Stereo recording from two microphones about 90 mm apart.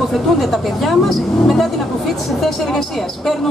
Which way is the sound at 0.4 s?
Centre (ahead or behind).